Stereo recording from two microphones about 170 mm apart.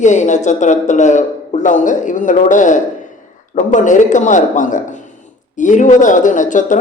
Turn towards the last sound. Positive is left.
turn(degrees=50)  # may be behind; listen again after turning